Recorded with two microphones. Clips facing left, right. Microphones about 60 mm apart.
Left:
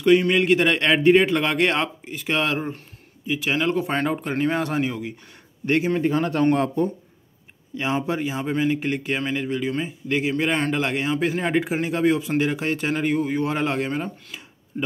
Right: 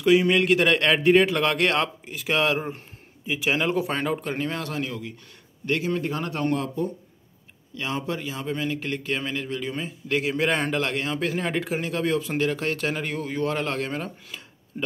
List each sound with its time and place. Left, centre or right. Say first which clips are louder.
0.0 s a man's voice: left 2 dB; centre
4.6 s speech: left 6 dB; left
7.7 s a man's voice: left 5 dB; left